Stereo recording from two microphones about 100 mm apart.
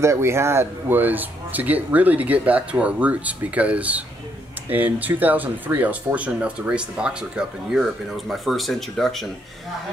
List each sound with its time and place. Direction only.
0.0 s speech: 30° right (ahead or behind); by 9.3 s centre (ahead or behind)